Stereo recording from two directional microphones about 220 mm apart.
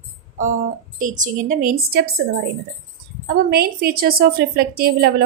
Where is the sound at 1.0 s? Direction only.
35° right (ahead or behind).